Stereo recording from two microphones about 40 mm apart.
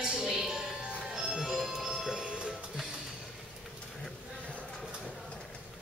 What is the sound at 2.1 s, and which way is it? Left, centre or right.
Music, right.